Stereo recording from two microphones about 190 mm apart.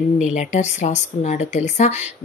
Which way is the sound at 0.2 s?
40° left (ahead or behind).